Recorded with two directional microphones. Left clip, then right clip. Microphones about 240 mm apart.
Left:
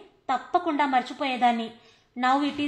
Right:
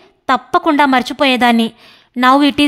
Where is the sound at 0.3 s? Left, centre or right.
Right.